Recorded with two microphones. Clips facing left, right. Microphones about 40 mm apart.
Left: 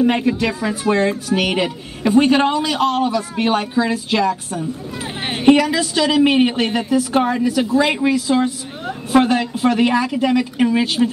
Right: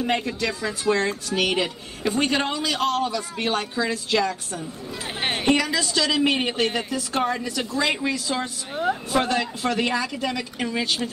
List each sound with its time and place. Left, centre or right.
0.0 s a woman's voice: centre
5.2 s a sound: centre
5.5 s a woman's voice: centre